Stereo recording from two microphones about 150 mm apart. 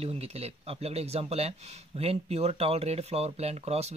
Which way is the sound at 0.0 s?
40° right (ahead or behind).